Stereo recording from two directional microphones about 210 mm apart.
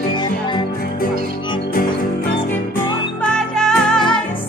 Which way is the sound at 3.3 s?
5° left (ahead or behind).